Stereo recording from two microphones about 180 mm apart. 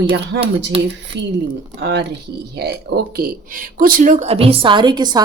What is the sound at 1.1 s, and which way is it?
Speech, 70° right (ahead or behind).